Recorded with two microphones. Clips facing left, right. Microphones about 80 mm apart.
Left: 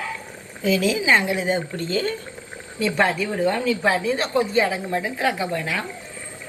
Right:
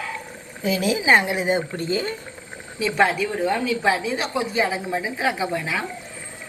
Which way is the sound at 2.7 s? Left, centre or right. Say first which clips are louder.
Right 1 dB; centre.